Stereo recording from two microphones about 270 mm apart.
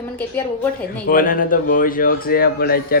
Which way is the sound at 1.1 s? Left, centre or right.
Left.